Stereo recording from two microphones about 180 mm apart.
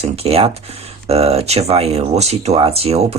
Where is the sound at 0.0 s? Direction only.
35° right (ahead or behind).